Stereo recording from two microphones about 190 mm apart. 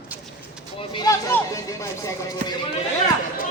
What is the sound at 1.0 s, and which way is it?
Chatter, 15° left (ahead or behind).